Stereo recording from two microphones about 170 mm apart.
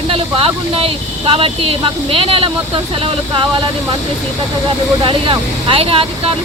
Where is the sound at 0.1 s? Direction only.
35° right (ahead or behind).